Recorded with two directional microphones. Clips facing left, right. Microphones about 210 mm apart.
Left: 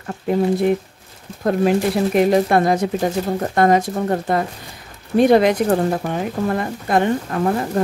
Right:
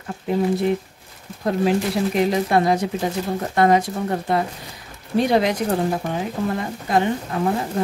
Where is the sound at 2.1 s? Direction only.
55° left (ahead or behind).